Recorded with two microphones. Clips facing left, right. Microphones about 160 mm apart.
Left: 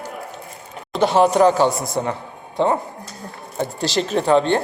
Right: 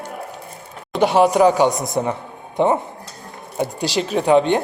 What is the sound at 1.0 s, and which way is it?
A man's voice, 10° right (ahead or behind).